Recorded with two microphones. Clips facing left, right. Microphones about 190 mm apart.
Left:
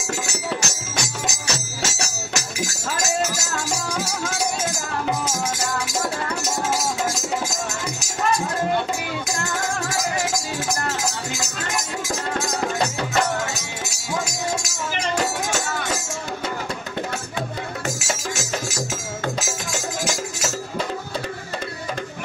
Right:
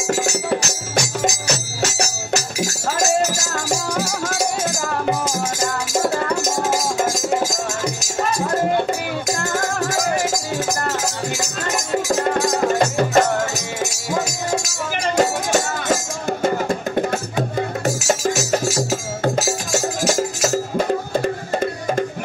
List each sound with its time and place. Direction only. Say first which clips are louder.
5.9 s music: right 9 dB; 55° right (ahead or behind)
9.6 s music: right 3 dB; 55° right (ahead or behind)
11.9 s music: right 12 dB; 50° right (ahead or behind)
15.1 s music: right 9 dB; 50° right (ahead or behind)